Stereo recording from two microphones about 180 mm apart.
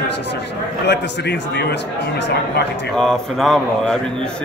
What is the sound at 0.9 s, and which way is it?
Speech, 70° left (ahead or behind).